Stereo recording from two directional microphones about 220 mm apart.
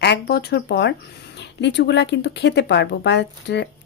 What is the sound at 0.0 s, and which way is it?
Speech, 50° left (ahead or behind).